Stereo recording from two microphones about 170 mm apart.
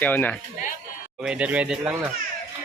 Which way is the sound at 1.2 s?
5° right (ahead or behind).